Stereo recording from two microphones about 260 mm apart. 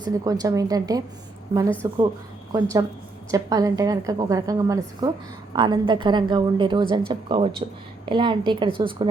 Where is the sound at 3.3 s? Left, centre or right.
Centre.